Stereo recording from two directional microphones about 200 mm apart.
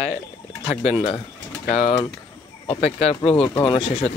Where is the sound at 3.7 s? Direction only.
30° left (ahead or behind).